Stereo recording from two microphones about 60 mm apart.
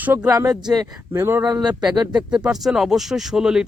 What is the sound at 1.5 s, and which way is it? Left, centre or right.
Speech, centre.